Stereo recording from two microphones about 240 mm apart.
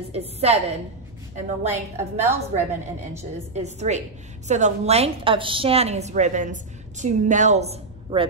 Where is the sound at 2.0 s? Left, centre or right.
Centre.